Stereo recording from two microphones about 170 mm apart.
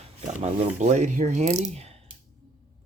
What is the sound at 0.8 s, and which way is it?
Speech, 45° right (ahead or behind).